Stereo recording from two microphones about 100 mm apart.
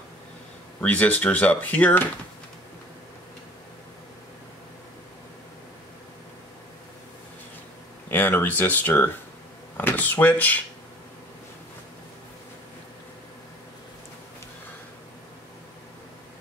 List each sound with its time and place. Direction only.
0.7 s speech: 15° left (ahead or behind)
8.1 s speech: 20° left (ahead or behind)